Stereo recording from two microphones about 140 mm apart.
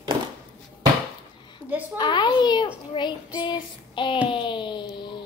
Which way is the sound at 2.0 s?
35° left (ahead or behind).